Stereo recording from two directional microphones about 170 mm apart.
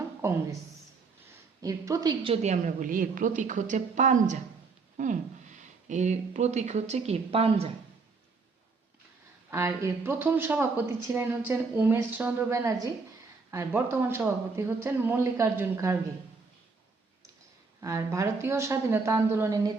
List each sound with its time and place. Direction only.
0.2 s speech: 15° right (ahead or behind)
1.6 s a woman's voice: 20° right (ahead or behind)
2.3 s a woman's voice: 40° right (ahead or behind)
9.5 s speech: 15° right (ahead or behind)
17.7 s speech: 20° right (ahead or behind)